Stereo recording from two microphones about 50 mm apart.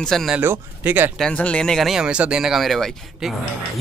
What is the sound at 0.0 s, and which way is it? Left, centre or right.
Speech, centre.